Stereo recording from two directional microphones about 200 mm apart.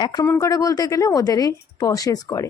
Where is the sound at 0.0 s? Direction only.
20° left (ahead or behind).